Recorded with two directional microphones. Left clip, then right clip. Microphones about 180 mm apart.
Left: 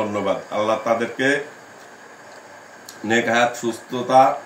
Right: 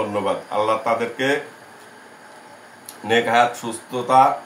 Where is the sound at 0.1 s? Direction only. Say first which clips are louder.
Even; 15° right (ahead or behind).